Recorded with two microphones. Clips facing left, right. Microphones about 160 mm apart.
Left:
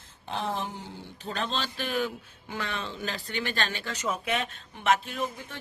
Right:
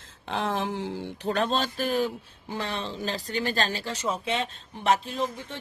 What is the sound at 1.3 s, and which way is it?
A man's voice, 45° right (ahead or behind).